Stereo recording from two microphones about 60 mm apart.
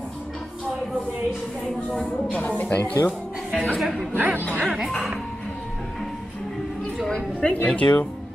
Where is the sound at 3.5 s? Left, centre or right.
Centre.